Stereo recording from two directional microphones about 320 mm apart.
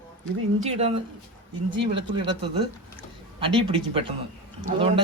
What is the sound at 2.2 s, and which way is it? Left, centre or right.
Speech, centre.